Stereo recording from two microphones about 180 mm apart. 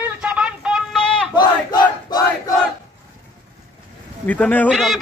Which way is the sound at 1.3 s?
25° left (ahead or behind).